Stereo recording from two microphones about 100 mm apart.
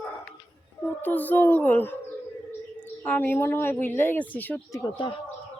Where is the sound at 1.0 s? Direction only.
15° left (ahead or behind).